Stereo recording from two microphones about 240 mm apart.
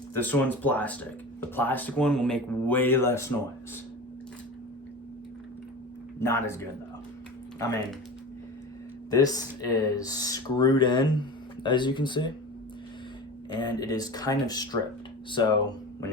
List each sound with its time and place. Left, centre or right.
0.1 s speech: centre
6.1 s speech: centre
9.0 s speech: centre
13.6 s speech: centre